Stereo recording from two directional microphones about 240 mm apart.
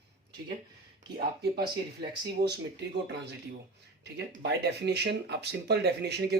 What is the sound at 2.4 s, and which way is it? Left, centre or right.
Speech, right.